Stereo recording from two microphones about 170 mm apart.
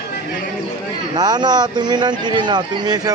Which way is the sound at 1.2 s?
25° right (ahead or behind).